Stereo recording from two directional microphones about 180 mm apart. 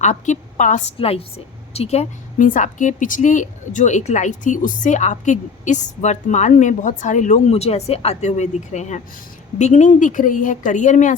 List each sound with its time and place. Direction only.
0.0 s a woman's voice: 40° left (ahead or behind)
0.9 s a woman's voice: 35° left (ahead or behind)